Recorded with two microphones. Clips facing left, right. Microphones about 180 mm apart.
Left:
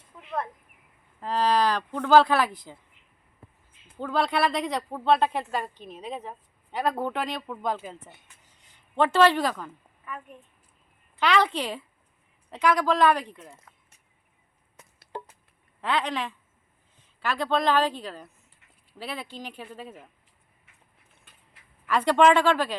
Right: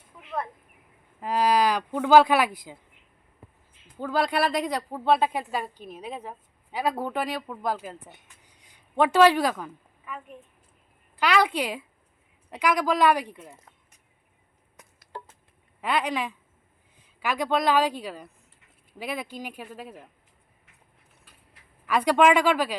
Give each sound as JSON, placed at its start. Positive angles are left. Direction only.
{"t": 1.2, "sound": "a woman's voice", "side_deg": -10}
{"t": 3.9, "sound": "a woman's voice", "side_deg": -5}
{"t": 11.2, "sound": "a woman's voice", "side_deg": -10}
{"t": 15.8, "sound": "a woman's voice", "side_deg": -10}
{"t": 21.8, "sound": "a woman's voice", "side_deg": -10}